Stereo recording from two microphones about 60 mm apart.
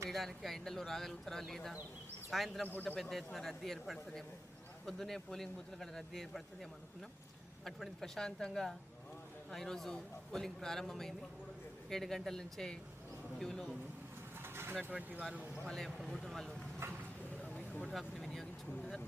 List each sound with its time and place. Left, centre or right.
0.1 s a man's voice: centre
14.4 s bird: right
14.8 s speech: right
15.6 s a man's voice: centre
17.4 s a sound: left
17.8 s a man's voice: centre